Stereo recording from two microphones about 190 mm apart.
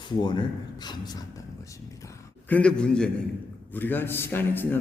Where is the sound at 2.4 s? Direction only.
5° left (ahead or behind).